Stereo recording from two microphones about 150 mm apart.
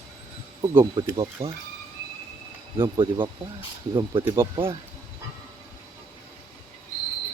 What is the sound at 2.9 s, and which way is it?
Speech, 30° right (ahead or behind).